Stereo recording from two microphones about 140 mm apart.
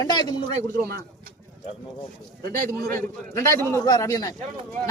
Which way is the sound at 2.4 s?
25° left (ahead or behind).